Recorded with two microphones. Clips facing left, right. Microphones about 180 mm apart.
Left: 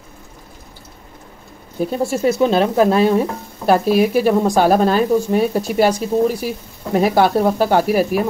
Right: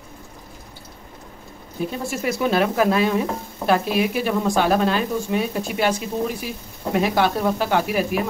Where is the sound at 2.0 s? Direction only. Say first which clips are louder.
Left 7 dB; 25° left (ahead or behind).